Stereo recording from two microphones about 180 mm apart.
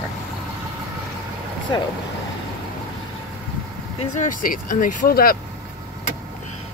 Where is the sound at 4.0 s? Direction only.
45° left (ahead or behind).